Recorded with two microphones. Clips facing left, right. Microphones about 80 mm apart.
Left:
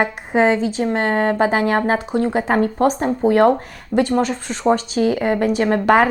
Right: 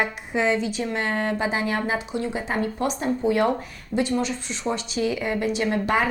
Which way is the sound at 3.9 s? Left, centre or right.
Left.